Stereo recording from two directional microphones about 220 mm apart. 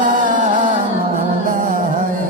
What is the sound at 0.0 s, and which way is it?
Music, 35° right (ahead or behind).